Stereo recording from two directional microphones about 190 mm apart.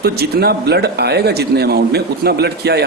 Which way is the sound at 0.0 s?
55° right (ahead or behind).